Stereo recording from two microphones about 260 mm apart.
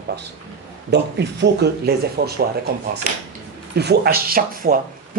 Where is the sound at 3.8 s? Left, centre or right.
Right.